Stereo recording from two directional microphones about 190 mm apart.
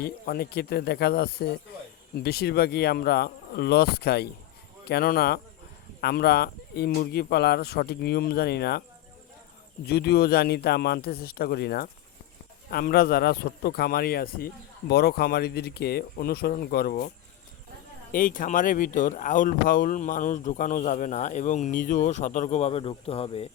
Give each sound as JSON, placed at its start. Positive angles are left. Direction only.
{"t": 0.0, "sound": "a man's voice", "side_deg": 55}
{"t": 9.8, "sound": "a man's voice", "side_deg": 55}
{"t": 18.1, "sound": "speech", "side_deg": 45}